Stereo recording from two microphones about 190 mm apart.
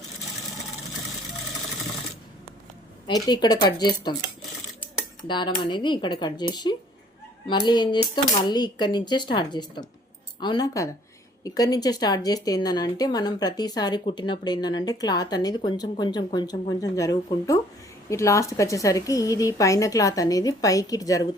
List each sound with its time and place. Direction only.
3.1 s a woman's voice: 20° left (ahead or behind)
5.3 s a woman's voice: 25° left (ahead or behind)